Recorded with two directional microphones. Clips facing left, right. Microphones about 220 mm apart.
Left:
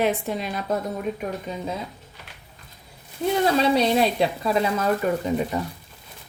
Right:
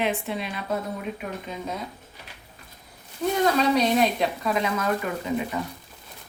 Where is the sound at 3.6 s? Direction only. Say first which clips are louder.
Left 1 dB; 30° left (ahead or behind).